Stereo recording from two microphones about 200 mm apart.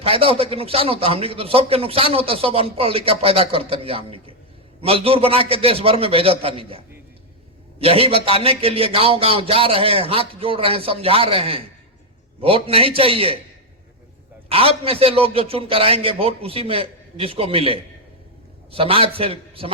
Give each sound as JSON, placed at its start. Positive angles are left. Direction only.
{"t": 0.0, "sound": "a man's voice", "side_deg": -30}
{"t": 14.5, "sound": "a man's voice", "side_deg": -30}